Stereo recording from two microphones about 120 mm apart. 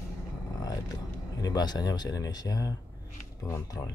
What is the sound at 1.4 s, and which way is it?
Speech, 35° left (ahead or behind).